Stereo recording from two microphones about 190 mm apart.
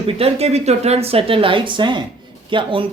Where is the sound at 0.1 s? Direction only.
30° right (ahead or behind).